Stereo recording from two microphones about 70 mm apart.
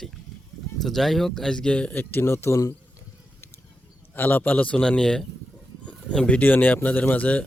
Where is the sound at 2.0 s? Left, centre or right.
Left.